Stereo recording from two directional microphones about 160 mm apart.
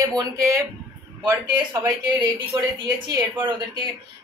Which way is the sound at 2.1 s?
25° right (ahead or behind).